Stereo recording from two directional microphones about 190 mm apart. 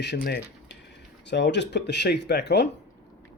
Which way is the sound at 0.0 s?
60° left (ahead or behind).